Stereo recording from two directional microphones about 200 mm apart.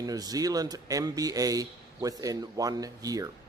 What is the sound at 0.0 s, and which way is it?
Speech, 20° right (ahead or behind).